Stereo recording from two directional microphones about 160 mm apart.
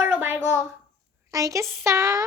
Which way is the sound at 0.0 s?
10° right (ahead or behind).